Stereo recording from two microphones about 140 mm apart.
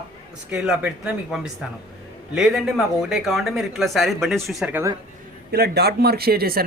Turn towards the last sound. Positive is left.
turn(degrees=-90)